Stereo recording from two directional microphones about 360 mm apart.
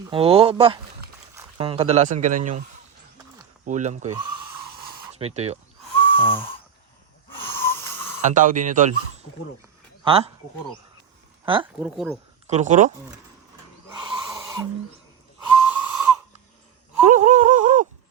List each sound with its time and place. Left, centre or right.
0.1 s speech: centre
3.7 s speech: centre
6.1 s a sound: centre
7.4 s snoring: centre
8.2 s speech: right
10.0 s speech: centre
11.4 s speech: centre
11.9 s speech: centre
12.5 s speech: centre
14.0 s owl: centre
15.4 s whistle: centre
17.1 s a sound: centre